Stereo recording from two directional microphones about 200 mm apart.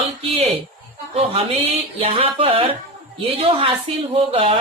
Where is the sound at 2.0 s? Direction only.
30° right (ahead or behind).